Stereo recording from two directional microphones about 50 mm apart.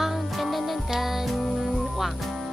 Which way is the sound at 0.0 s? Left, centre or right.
Centre.